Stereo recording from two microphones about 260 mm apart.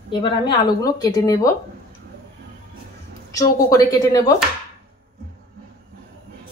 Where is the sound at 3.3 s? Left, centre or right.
Centre.